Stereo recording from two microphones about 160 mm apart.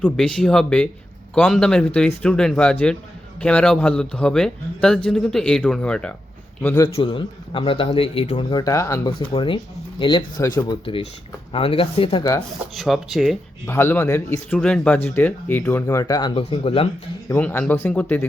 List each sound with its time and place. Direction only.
0.0 s speech: 5° left (ahead or behind)
6.8 s a man's voice: 30° left (ahead or behind)
9.1 s a man's voice: 30° left (ahead or behind)
12.7 s speech: centre (ahead or behind)
13.7 s speech: 15° left (ahead or behind)
16.4 s a man's voice: 35° left (ahead or behind)
17.2 s speech: 15° left (ahead or behind)